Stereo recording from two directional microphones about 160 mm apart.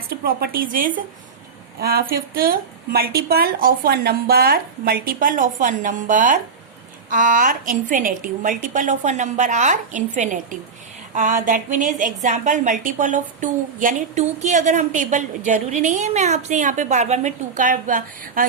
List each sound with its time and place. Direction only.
0.1 s a woman's voice: 70° right (ahead or behind)
1.8 s a woman's voice: 70° right (ahead or behind)